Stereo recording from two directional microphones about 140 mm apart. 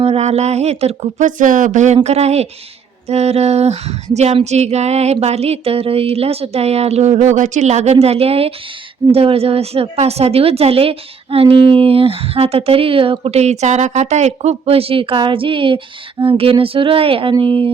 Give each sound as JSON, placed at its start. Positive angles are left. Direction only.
{"t": 0.0, "sound": "a woman's voice", "side_deg": -50}